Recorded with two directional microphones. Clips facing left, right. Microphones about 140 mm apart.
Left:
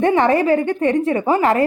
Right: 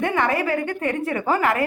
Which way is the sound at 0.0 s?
30° left (ahead or behind).